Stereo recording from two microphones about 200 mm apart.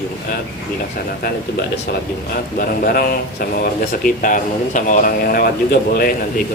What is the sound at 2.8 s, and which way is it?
Speech, 50° left (ahead or behind).